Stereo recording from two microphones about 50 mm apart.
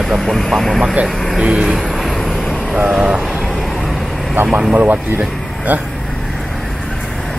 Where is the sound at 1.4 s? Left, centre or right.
Centre.